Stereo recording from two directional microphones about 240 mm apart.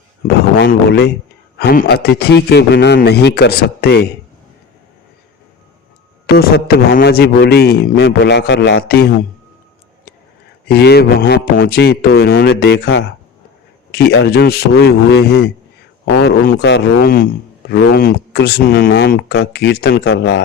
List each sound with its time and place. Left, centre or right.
0.5 s speech: left
6.2 s a man's voice: left
10.7 s a man's voice: left